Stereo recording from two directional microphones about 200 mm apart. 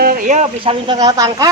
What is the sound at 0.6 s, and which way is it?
Speech, 25° right (ahead or behind).